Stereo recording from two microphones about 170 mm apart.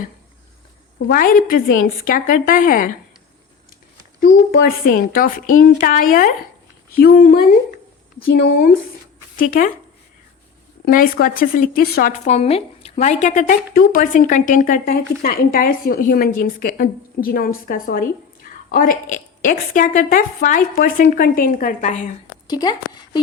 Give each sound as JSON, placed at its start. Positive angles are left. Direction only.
{"t": 0.9, "sound": "speech", "side_deg": 60}
{"t": 4.2, "sound": "speech", "side_deg": 55}
{"t": 10.8, "sound": "speech", "side_deg": 55}
{"t": 12.1, "sound": "a woman's voice", "side_deg": 40}
{"t": 22.4, "sound": "a woman's voice", "side_deg": 25}